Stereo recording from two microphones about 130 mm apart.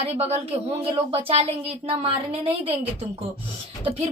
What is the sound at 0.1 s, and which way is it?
A woman's voice, 55° right (ahead or behind).